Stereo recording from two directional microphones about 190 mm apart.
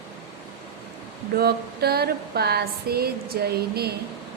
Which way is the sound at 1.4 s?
55° right (ahead or behind).